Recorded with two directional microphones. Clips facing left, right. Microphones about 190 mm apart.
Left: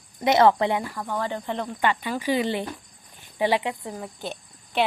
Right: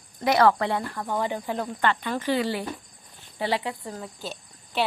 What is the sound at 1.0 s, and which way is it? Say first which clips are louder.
Speech: right 1 dB; 10° right (ahead or behind).